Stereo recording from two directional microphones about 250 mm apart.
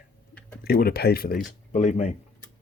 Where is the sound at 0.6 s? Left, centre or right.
Left.